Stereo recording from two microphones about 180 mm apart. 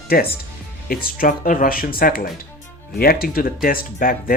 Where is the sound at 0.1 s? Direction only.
55° left (ahead or behind).